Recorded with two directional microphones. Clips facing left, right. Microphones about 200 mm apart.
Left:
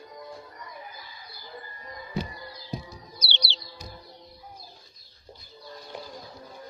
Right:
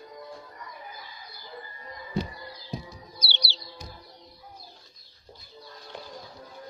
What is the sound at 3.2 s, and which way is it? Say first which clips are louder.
Music: left 1 dB; 20° left (ahead or behind).